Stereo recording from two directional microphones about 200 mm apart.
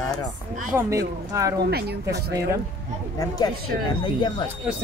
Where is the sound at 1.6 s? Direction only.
55° right (ahead or behind).